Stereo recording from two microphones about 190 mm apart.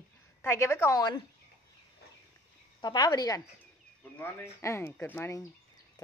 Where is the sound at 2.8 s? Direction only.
20° left (ahead or behind).